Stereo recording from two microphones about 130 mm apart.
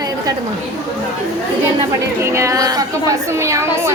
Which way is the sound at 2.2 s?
20° right (ahead or behind).